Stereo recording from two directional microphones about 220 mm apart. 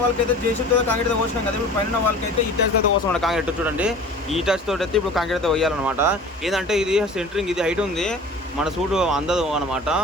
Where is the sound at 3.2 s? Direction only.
5° right (ahead or behind).